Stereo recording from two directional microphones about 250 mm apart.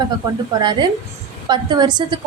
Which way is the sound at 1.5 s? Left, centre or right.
Centre.